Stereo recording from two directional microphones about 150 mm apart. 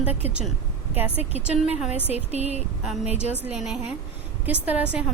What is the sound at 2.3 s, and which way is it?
Speech, 45° right (ahead or behind).